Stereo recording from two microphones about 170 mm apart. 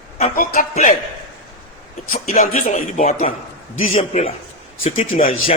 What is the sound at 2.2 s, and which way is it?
Speech, 40° left (ahead or behind).